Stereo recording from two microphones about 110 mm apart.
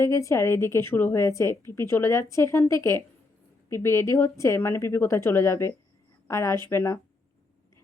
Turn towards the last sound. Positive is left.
turn(degrees=25)  # may be behind; listen again after turning